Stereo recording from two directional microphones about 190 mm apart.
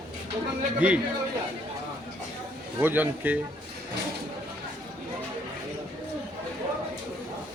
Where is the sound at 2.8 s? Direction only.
10° right (ahead or behind).